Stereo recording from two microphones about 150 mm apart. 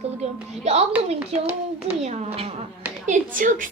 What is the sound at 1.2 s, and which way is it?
Speech, 10° right (ahead or behind).